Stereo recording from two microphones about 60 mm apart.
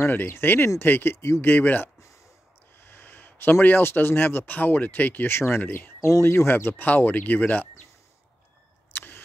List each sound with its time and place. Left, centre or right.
0.0 s speech: left
1.5 s speech: left
5.9 s speech: left
6.2 s speech: left
8.9 s camera: left